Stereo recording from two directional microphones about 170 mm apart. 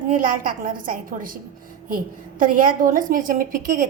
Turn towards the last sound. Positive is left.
turn(degrees=-55)  # may be behind; listen again after turning